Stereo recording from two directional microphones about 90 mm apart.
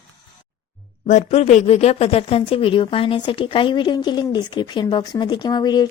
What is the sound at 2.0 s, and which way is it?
Speech, 90° left.